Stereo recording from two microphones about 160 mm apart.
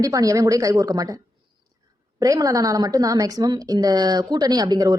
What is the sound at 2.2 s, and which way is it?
Speech, 20° right (ahead or behind).